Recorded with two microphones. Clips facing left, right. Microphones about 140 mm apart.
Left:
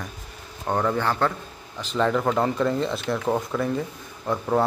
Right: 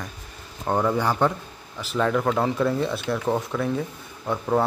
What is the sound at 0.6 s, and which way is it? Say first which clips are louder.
Speech: right 1 dB; 10° right (ahead or behind).